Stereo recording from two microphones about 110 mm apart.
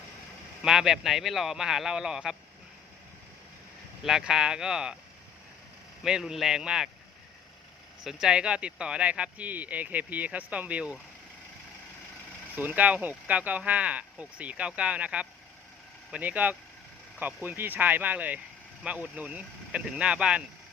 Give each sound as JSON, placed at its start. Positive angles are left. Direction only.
{"t": 0.6, "sound": "speech", "side_deg": -5}
{"t": 4.0, "sound": "speech", "side_deg": -5}
{"t": 6.0, "sound": "speech", "side_deg": -5}
{"t": 8.0, "sound": "speech", "side_deg": -5}
{"t": 12.5, "sound": "speech", "side_deg": -15}